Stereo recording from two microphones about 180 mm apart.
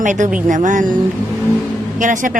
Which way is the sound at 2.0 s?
45° right (ahead or behind).